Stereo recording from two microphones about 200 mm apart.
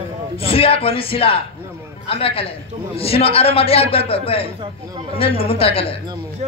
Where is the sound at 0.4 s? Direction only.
30° left (ahead or behind).